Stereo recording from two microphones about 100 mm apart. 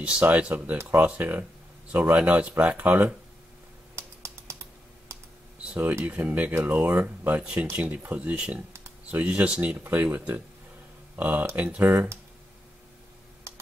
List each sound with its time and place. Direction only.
0.0 s speech: 15° right (ahead or behind)
3.9 s computer keyboard: 30° right (ahead or behind)
5.6 s speech: 15° right (ahead or behind)
11.9 s speech: 25° right (ahead or behind)
13.5 s computer keyboard: 30° right (ahead or behind)